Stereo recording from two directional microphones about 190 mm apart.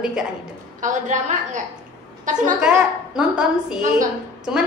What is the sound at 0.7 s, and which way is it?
A woman's voice, 40° right (ahead or behind).